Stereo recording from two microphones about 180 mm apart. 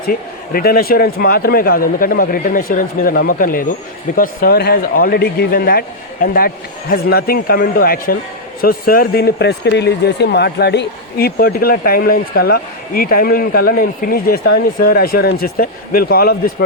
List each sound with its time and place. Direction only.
0.0 s speech: 55° left (ahead or behind)